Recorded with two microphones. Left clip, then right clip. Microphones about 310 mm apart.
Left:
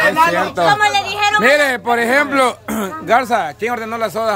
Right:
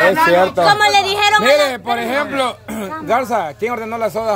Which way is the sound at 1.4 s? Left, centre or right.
Centre.